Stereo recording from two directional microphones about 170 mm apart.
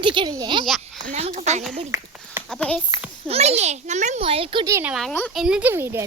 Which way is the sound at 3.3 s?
40° right (ahead or behind).